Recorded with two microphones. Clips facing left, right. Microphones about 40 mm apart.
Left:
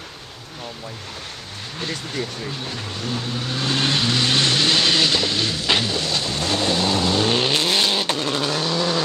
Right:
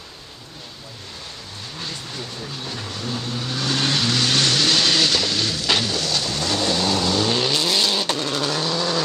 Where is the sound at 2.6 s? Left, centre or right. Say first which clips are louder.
Left 1 dB; centre.